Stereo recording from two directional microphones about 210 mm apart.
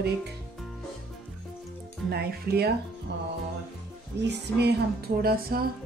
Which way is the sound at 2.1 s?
50° right (ahead or behind).